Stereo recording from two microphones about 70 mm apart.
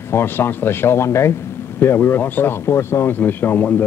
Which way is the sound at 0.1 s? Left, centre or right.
Left.